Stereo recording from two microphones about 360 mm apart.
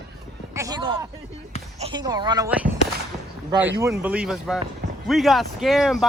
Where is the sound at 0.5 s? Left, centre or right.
Centre.